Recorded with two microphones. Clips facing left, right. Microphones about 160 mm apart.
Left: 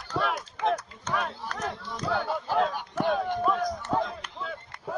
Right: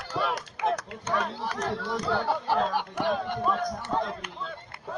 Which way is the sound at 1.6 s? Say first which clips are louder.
Right 3 dB; 75° right (ahead or behind).